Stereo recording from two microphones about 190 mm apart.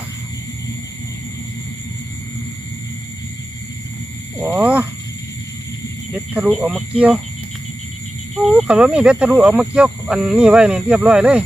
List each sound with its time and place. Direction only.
4.4 s speech: 10° right (ahead or behind)
6.1 s speech: 10° right (ahead or behind)
8.4 s speech: 5° right (ahead or behind)